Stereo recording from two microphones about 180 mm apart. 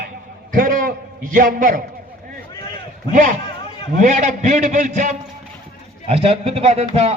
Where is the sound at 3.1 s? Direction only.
45° right (ahead or behind).